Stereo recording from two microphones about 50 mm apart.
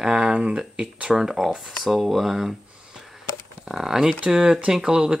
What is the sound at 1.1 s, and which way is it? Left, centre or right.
Speech, centre.